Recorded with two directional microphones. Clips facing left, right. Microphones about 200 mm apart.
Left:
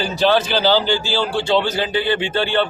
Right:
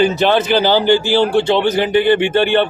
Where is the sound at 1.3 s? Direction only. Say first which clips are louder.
Right 5 dB; 20° right (ahead or behind).